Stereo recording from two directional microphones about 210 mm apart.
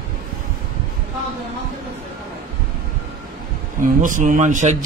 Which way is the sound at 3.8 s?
40° right (ahead or behind).